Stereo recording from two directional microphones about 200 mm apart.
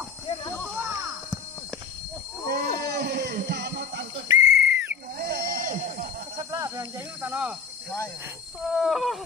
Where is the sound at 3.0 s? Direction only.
50° right (ahead or behind).